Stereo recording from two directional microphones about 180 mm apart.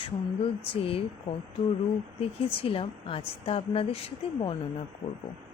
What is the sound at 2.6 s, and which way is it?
Speech, 30° left (ahead or behind).